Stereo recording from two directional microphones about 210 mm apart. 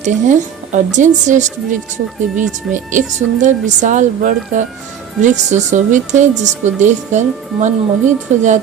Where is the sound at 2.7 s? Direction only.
35° right (ahead or behind).